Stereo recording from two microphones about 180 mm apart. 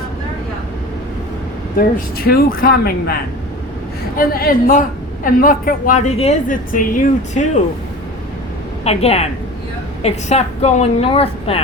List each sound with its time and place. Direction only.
2.1 s speech: 55° left (ahead or behind)
4.2 s a woman's voice: 55° left (ahead or behind)
8.8 s a woman's voice: 35° left (ahead or behind)